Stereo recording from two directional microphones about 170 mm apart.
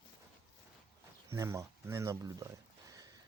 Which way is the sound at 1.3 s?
15° right (ahead or behind).